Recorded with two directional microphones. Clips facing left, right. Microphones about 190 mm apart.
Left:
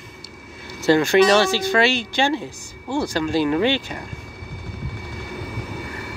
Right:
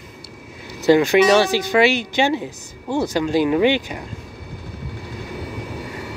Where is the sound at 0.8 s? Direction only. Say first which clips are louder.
Right 2 dB; 15° right (ahead or behind).